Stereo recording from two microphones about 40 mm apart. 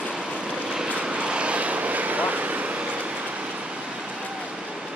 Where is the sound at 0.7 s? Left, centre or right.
Right.